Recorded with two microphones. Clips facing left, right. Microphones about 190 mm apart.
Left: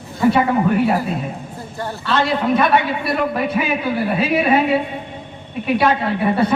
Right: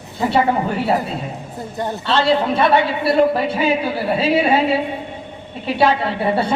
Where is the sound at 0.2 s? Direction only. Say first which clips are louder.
Left 2 dB; 30° right (ahead or behind).